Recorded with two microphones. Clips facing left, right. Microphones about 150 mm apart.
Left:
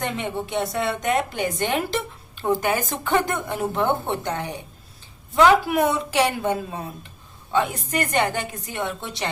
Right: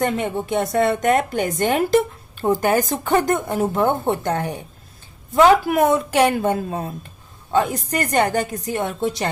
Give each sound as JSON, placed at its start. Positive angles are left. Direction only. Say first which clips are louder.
{"t": 0.0, "sound": "a woman's voice", "louder": "right 6 dB", "side_deg": -45}